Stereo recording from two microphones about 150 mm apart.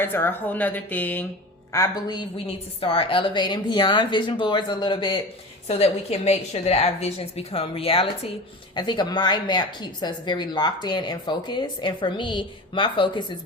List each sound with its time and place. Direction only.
0.0 s speech: 15° left (ahead or behind)
1.7 s speech: 25° left (ahead or behind)
5.6 s a woman's voice: 45° left (ahead or behind)
8.7 s speech: 30° left (ahead or behind)